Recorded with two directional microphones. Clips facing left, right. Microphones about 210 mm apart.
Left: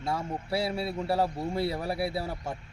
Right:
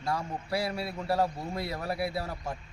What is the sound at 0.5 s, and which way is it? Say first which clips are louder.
A man's voice: left 2 dB; 25° left (ahead or behind).